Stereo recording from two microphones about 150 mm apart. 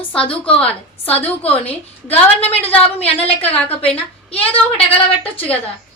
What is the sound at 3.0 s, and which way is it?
A woman's voice, 40° left (ahead or behind).